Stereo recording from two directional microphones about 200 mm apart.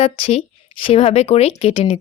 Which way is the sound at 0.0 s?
30° left (ahead or behind).